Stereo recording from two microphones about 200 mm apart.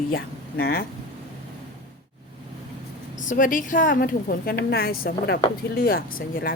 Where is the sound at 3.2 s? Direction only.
40° left (ahead or behind).